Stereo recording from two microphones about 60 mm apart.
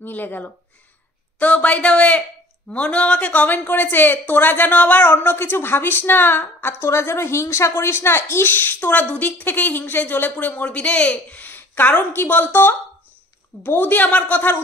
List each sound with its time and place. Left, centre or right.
0.0 s a woman's voice: left
6.8 s a woman's voice: left